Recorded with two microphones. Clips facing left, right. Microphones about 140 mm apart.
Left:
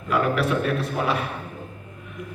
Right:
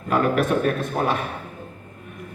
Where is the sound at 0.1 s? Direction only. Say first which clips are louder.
Right 2 dB; 45° right (ahead or behind).